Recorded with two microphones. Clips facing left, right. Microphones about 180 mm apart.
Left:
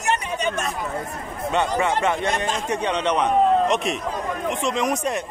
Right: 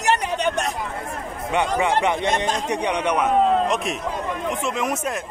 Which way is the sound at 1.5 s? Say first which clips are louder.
Even; 15° right (ahead or behind).